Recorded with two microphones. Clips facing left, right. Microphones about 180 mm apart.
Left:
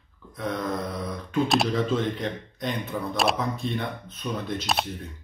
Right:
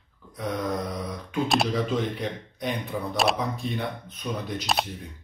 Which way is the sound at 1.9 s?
10° right (ahead or behind).